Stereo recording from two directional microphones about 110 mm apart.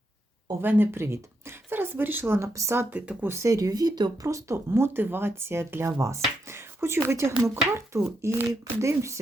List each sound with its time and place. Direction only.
0.6 s speech: 20° right (ahead or behind)
2.9 s speech: 15° right (ahead or behind)
3.3 s speech: 30° right (ahead or behind)